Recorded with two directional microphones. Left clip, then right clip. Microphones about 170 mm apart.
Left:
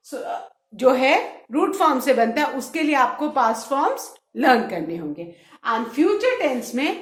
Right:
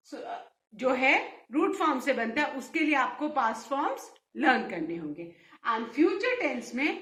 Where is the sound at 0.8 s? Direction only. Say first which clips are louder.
Left 8 dB; 35° left (ahead or behind).